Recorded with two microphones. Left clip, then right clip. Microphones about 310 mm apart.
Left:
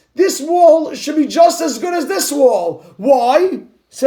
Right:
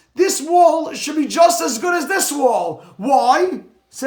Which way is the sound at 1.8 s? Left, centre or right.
Right.